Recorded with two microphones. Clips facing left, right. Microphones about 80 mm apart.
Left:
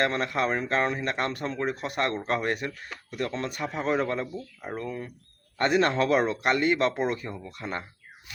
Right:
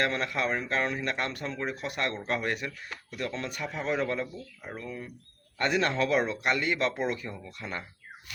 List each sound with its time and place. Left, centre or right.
0.0 s speech: left
4.8 s speech: left